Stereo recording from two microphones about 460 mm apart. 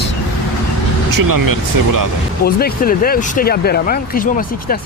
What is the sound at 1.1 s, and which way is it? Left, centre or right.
Speech, right.